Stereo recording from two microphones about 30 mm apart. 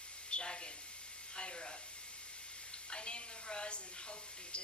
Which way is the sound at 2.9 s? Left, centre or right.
Left.